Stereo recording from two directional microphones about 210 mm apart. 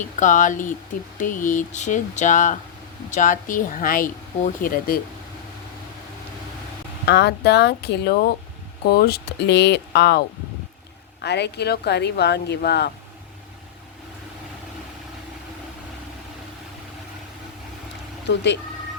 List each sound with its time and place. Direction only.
0.0 s speech: 35° left (ahead or behind)
7.0 s speech: 50° left (ahead or behind)